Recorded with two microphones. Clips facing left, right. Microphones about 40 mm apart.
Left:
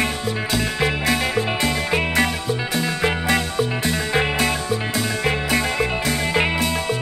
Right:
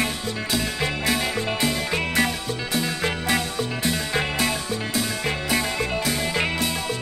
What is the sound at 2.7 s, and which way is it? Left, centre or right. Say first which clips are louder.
Music: left 2 dB; centre.